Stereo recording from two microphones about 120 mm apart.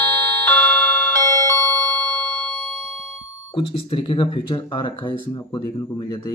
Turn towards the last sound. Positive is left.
turn(degrees=40)  # may be behind; listen again after turning